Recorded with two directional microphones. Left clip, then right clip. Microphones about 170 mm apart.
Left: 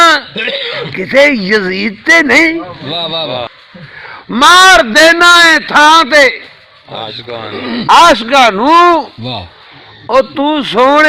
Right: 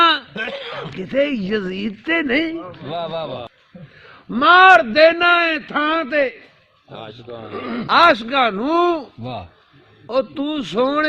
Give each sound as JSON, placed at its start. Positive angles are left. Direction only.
{"t": 0.3, "sound": "throat clearing", "side_deg": -15}
{"t": 1.1, "sound": "a man's voice", "side_deg": -30}
{"t": 2.9, "sound": "a man's voice", "side_deg": -10}
{"t": 4.3, "sound": "a man's voice", "side_deg": -40}
{"t": 7.5, "sound": "a man's voice", "side_deg": -15}
{"t": 7.9, "sound": "a man's voice", "side_deg": -30}
{"t": 10.1, "sound": "a man's voice", "side_deg": -35}